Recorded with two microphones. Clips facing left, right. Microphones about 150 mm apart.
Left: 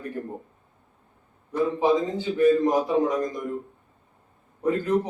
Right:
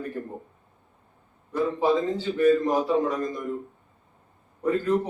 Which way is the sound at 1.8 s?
15° left (ahead or behind).